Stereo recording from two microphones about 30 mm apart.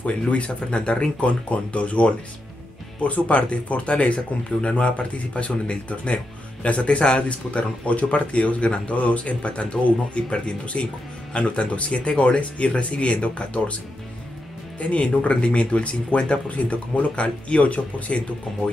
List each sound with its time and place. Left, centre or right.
0.0 s speech: left
1.5 s speech: left
14.8 s speech: left